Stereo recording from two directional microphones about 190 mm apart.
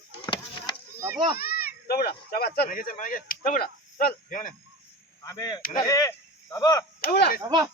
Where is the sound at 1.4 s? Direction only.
55° left (ahead or behind).